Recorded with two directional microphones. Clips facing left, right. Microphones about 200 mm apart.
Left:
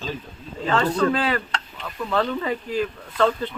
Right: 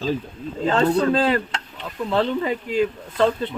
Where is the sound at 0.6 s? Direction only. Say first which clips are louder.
Right 3 dB; 25° right (ahead or behind).